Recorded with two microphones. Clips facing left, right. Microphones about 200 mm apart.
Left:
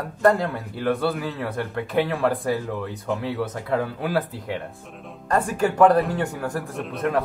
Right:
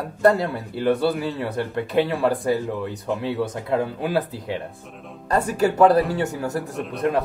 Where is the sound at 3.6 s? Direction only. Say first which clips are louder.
Right 1 dB; 20° right (ahead or behind).